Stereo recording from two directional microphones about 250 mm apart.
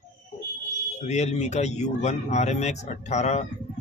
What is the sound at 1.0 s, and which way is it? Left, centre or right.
Speech, left.